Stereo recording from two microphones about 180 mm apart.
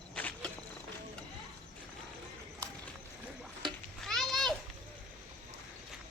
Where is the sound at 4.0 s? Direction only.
Centre (ahead or behind).